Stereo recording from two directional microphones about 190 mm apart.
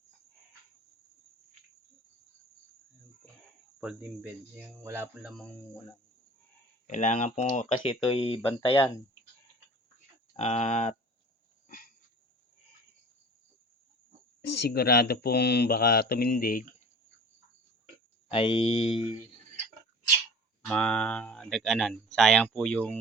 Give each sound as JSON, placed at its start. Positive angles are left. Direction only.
{"t": 3.8, "sound": "speech", "side_deg": -5}
{"t": 5.3, "sound": "speech", "side_deg": 5}
{"t": 6.8, "sound": "speech", "side_deg": 40}
{"t": 10.3, "sound": "speech", "side_deg": 35}
{"t": 11.7, "sound": "a sound", "side_deg": 50}
{"t": 14.4, "sound": "speech", "side_deg": 60}
{"t": 18.3, "sound": "speech", "side_deg": 30}
{"t": 20.7, "sound": "speech", "side_deg": 5}